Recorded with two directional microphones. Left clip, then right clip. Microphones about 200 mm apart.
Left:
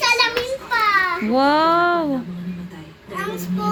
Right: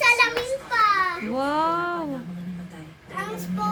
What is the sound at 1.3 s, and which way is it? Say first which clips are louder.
Speech: left 12 dB; 20° left (ahead or behind).